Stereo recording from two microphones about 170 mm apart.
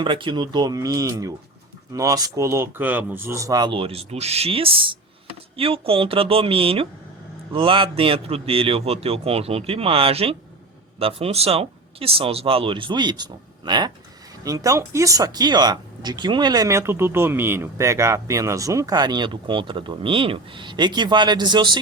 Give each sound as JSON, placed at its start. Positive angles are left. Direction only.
{"t": 0.0, "sound": "speech", "side_deg": -30}